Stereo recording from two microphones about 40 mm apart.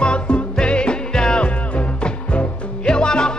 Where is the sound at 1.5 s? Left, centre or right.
Left.